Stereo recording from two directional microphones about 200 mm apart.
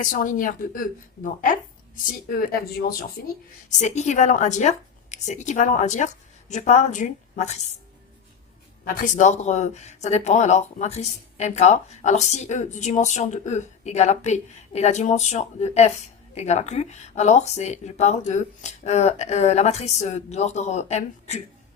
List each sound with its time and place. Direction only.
0.0 s a woman's voice: 40° left (ahead or behind)
3.8 s speech: 35° left (ahead or behind)
8.8 s speech: 45° left (ahead or behind)